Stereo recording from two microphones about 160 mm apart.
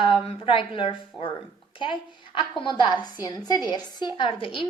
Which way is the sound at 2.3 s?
30° left (ahead or behind).